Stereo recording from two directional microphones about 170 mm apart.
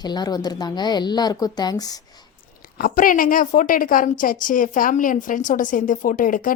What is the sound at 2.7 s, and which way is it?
A woman's voice, 55° left (ahead or behind).